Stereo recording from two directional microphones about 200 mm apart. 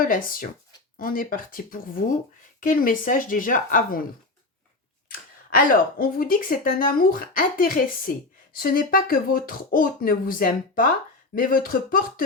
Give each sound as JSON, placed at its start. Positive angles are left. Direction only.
{"t": 0.0, "sound": "speech", "side_deg": 45}
{"t": 5.5, "sound": "speech", "side_deg": 45}